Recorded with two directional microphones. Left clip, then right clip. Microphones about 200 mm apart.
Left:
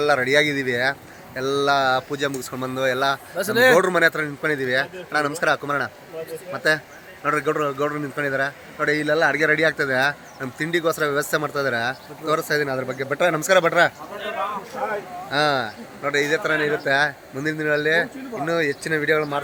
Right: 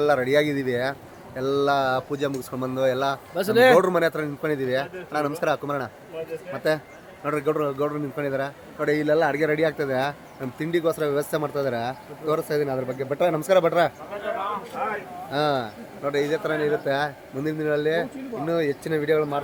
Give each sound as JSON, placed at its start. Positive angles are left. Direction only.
{"t": 0.0, "sound": "speech", "side_deg": 0}
{"t": 3.3, "sound": "speech", "side_deg": -75}
{"t": 3.8, "sound": "speech", "side_deg": -5}
{"t": 15.3, "sound": "speech", "side_deg": 0}